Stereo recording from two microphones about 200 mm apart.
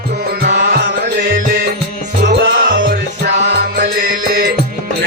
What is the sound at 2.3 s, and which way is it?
Music, 50° right (ahead or behind).